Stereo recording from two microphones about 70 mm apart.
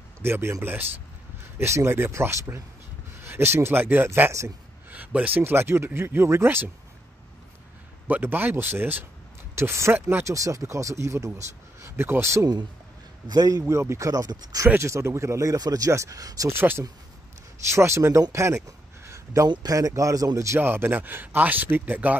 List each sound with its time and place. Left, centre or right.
0.2 s speech: right
1.6 s speech: right
8.1 s speech: right
9.6 s speech: right
13.3 s speech: right
13.7 s speech: right
14.8 s speech: right
15.5 s speech: right
15.9 s speech: right
16.4 s speech: right
18.3 s a sound: right
19.4 s speech: right
19.9 s speech: right
20.6 s speech: right